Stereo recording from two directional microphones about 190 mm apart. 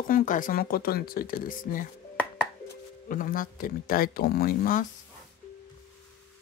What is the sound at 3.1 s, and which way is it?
Speech, 45° left (ahead or behind).